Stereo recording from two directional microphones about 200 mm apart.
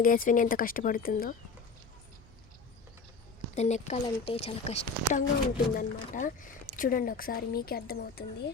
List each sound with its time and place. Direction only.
0.0 s speech: 45° left (ahead or behind)
3.5 s a woman's voice: 35° left (ahead or behind); by 8.2 s 50° left (ahead or behind)